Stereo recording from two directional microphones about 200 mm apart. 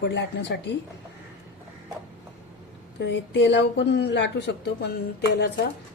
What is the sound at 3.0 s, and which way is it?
Speech, 60° left (ahead or behind).